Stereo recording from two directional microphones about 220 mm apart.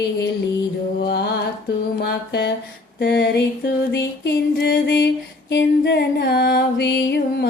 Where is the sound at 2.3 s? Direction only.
50° left (ahead or behind).